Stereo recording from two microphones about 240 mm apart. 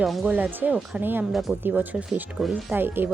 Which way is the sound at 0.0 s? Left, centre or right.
Centre.